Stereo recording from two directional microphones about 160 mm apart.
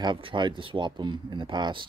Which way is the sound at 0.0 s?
30° right (ahead or behind).